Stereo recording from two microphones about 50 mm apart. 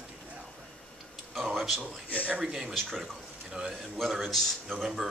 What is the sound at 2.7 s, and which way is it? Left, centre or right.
A man's voice, centre.